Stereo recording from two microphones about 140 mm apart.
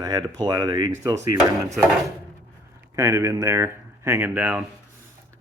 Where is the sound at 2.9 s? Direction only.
20° right (ahead or behind).